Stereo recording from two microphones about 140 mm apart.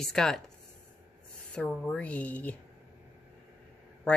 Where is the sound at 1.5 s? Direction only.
10° left (ahead or behind).